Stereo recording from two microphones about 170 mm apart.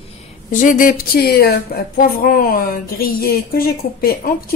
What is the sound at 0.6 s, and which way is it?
Speech, 55° left (ahead or behind).